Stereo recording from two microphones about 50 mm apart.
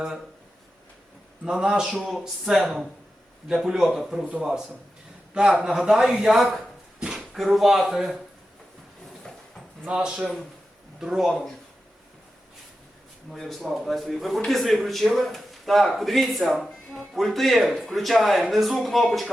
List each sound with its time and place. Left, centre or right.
1.5 s a man's voice: centre
5.3 s a man's voice: centre
9.8 s a man's voice: centre
13.3 s speech: centre